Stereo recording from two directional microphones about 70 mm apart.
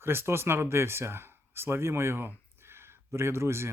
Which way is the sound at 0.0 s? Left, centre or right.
Right.